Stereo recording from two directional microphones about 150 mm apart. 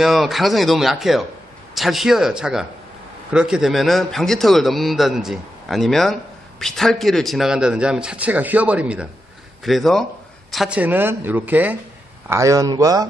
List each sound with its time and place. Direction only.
0.0 s a man's voice: centre (ahead or behind); by 13.1 s 25° right (ahead or behind)